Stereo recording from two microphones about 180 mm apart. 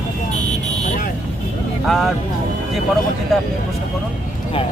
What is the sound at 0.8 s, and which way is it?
Vehicle, 50° left (ahead or behind).